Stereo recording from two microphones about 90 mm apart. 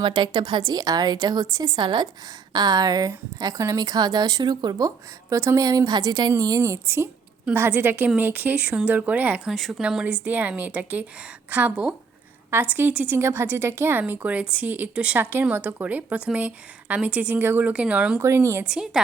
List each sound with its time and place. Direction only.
0.0 s speech: 60° right (ahead or behind)
5.3 s speech: 35° right (ahead or behind)
6.4 s a woman's voice: 40° right (ahead or behind); by 9.5 s 15° right (ahead or behind)
9.5 s speech: centre (ahead or behind)
9.8 s a woman's voice: 10° right (ahead or behind)
13.1 s a woman's voice: 30° right (ahead or behind); by 18.2 s 15° right (ahead or behind)
18.2 s a woman's voice: 30° right (ahead or behind)
18.6 s speech: 10° right (ahead or behind)